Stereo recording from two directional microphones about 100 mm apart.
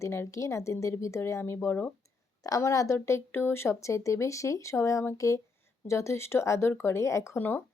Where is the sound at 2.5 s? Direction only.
35° left (ahead or behind).